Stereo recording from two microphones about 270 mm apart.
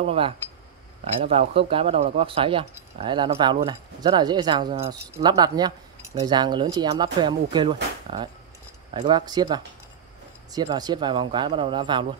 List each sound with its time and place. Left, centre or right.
0.0 s speech: right